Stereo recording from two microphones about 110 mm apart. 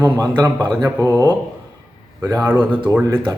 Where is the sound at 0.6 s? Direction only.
15° right (ahead or behind).